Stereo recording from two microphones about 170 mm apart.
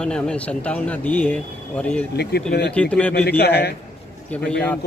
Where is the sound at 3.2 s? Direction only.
70° left (ahead or behind).